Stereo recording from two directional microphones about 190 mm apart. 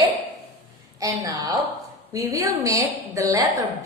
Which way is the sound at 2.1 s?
15° right (ahead or behind).